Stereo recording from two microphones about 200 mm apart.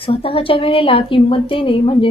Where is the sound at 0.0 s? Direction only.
25° left (ahead or behind).